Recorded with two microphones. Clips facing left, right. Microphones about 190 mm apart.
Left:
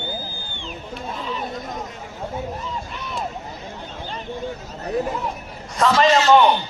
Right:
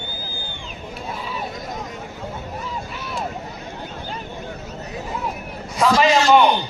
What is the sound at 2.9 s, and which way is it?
Vehicle, 5° right (ahead or behind).